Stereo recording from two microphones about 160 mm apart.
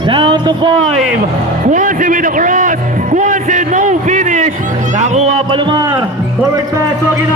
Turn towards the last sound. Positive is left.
turn(degrees=-25)  # may be behind; listen again after turning